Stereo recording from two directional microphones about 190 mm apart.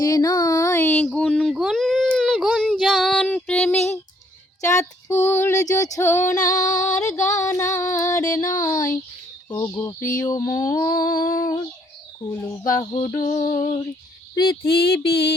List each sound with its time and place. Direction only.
0.0 s a sound: 20° left (ahead or behind)
4.6 s female singing: 15° left (ahead or behind)
11.0 s child singing: 20° left (ahead or behind)
12.4 s female singing: 15° left (ahead or behind)
13.2 s child singing: 25° left (ahead or behind)
14.6 s a sound: 55° left (ahead or behind)